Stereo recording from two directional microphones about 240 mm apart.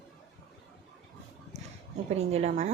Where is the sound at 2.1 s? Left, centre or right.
Right.